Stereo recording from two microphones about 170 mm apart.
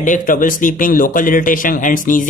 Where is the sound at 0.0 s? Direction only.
50° left (ahead or behind).